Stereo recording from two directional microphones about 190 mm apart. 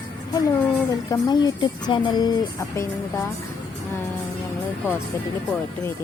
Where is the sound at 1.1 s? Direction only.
20° left (ahead or behind).